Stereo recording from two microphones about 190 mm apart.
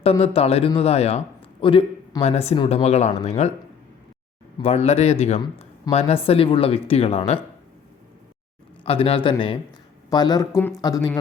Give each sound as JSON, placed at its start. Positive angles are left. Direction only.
{"t": 0.0, "sound": "a man's voice", "side_deg": 30}
{"t": 4.5, "sound": "a man's voice", "side_deg": 30}
{"t": 8.8, "sound": "a man's voice", "side_deg": 30}